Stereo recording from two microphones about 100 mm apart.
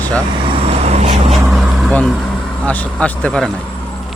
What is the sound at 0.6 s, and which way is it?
Vehicle, 85° right.